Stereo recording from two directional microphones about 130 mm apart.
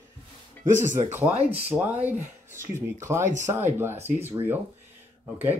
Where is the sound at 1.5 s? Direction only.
15° right (ahead or behind).